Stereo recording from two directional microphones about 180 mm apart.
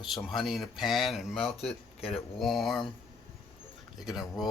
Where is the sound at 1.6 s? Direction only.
35° left (ahead or behind).